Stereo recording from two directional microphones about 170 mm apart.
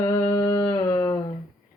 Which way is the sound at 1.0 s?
20° left (ahead or behind).